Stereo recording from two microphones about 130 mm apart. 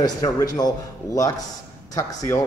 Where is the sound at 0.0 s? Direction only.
30° left (ahead or behind).